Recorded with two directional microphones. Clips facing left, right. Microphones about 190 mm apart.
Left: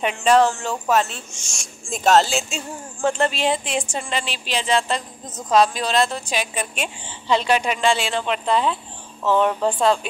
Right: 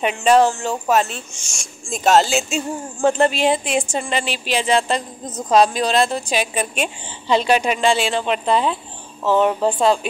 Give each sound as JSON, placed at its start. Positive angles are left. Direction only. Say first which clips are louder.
{"t": 0.0, "sound": "a woman's voice", "louder": "right 2 dB", "side_deg": -15}
{"t": 2.0, "sound": "a woman's voice", "louder": "right 1 dB", "side_deg": -5}